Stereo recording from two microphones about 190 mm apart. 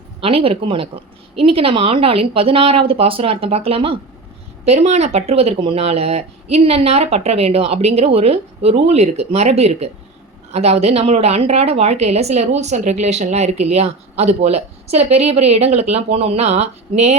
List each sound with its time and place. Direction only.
0.2 s a woman's voice: 30° right (ahead or behind)